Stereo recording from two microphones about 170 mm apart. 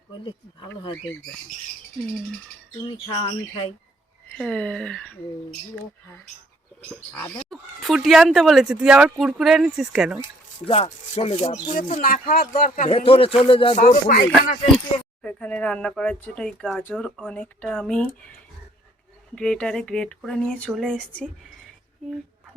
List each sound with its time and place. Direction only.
2.8 s speech: 30° left (ahead or behind)
4.4 s speech: 5° left (ahead or behind)
6.9 s speech: 10° left (ahead or behind)
10.7 s speech: 35° left (ahead or behind)
11.9 s speech: 50° left (ahead or behind)
12.9 s speech: 30° left (ahead or behind)
13.8 s speech: 55° left (ahead or behind)
15.2 s speech: 5° left (ahead or behind)
19.4 s speech: 5° left (ahead or behind)